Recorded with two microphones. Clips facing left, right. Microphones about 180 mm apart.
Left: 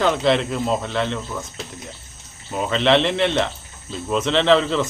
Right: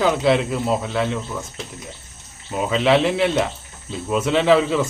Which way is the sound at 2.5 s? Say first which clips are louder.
Right 1 dB; 5° right (ahead or behind).